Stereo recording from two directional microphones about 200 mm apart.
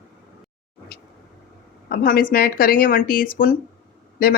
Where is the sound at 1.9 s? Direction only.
45° left (ahead or behind).